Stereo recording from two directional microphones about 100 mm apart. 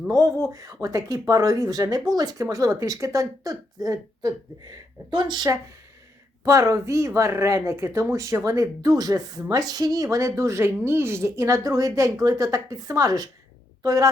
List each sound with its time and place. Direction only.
0.1 s a woman's voice: 40° right (ahead or behind)
6.4 s a woman's voice: 30° right (ahead or behind)